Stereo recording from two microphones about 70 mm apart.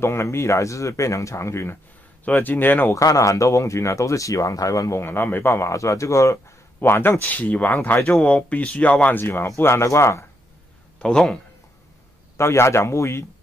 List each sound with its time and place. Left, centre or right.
0.0 s speech: left
2.3 s speech: left
2.9 s speech: left
5.0 s speech: left
6.8 s speech: left
8.2 s speech: centre
9.2 s speech: left
11.0 s speech: centre
12.4 s speech: left